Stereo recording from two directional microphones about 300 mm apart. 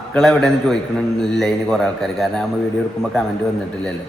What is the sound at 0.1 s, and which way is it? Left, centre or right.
A man's voice, centre.